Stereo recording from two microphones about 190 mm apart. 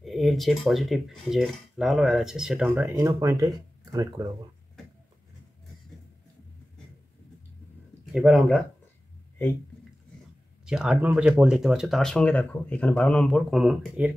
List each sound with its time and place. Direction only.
0.0 s speech: centre (ahead or behind); by 4.3 s 20° right (ahead or behind)
8.1 s speech: centre (ahead or behind)
10.6 s speech: 5° right (ahead or behind)